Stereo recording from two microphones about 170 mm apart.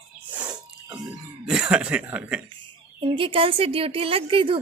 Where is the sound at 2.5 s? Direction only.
30° right (ahead or behind).